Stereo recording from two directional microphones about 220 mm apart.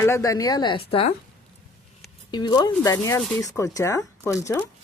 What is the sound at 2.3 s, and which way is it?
Speech, 20° left (ahead or behind).